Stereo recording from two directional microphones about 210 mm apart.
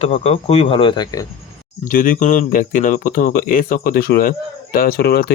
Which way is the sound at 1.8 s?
40° left (ahead or behind).